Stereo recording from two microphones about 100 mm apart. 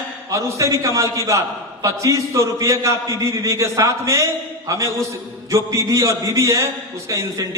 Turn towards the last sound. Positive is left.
turn(degrees=-30)  # may be behind; listen again after turning